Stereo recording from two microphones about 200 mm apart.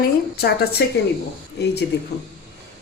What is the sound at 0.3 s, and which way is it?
Speech, 50° left (ahead or behind).